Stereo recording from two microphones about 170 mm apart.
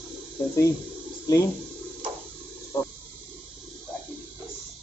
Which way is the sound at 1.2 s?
20° left (ahead or behind).